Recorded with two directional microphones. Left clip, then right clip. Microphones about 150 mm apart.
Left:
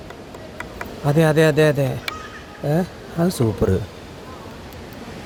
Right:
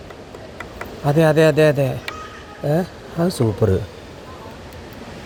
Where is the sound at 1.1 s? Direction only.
Centre (ahead or behind).